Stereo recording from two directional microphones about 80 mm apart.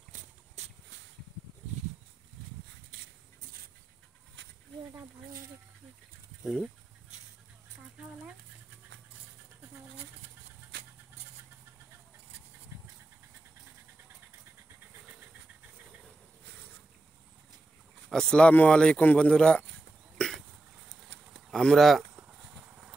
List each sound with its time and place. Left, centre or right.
6.4 s speech: centre
18.1 s speech: centre
20.2 s hiccup: centre
21.5 s speech: centre
22.1 s a sound: right